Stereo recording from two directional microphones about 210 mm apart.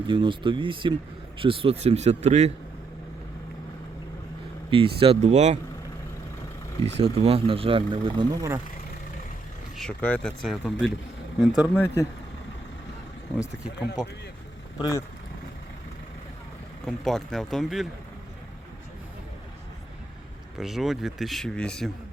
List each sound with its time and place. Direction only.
0.1 s speech: 20° right (ahead or behind)
4.7 s speech: 25° right (ahead or behind)
6.8 s speech: 30° right (ahead or behind); by 8.6 s 15° right (ahead or behind)
9.7 s speech: 5° left (ahead or behind)
11.7 s speech: 10° left (ahead or behind)
14.8 s speech: 15° left (ahead or behind)
16.8 s speech: centre (ahead or behind)
20.6 s speech: centre (ahead or behind)